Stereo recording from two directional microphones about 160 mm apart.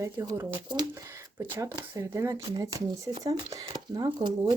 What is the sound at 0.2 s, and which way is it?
Speech, 20° right (ahead or behind).